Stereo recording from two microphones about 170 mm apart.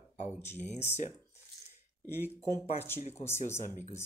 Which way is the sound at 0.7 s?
40° left (ahead or behind).